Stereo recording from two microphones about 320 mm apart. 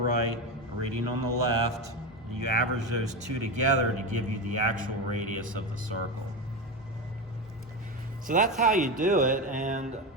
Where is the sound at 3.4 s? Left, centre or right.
Left.